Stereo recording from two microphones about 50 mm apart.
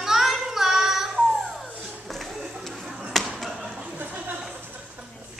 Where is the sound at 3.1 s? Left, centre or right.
Centre.